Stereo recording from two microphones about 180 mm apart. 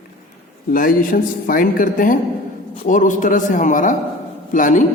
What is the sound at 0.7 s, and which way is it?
A man's voice, 50° left (ahead or behind).